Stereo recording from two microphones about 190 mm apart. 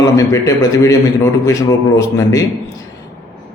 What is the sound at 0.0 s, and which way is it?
A man's voice, 15° left (ahead or behind).